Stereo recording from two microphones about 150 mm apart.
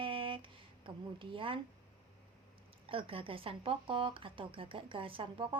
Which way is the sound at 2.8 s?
35° right (ahead or behind).